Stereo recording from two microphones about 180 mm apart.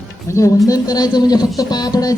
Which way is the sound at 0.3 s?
15° left (ahead or behind).